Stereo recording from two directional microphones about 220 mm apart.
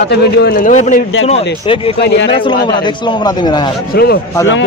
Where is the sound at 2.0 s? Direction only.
50° left (ahead or behind).